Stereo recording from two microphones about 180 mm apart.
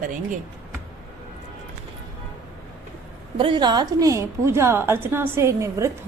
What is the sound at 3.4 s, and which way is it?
A woman's voice, 25° right (ahead or behind).